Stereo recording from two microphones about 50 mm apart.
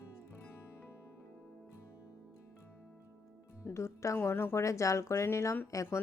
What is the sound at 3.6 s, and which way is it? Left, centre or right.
Speech, left.